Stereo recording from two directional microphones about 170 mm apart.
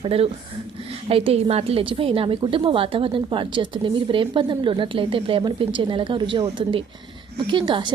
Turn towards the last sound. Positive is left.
turn(degrees=-30)  # may be behind; listen again after turning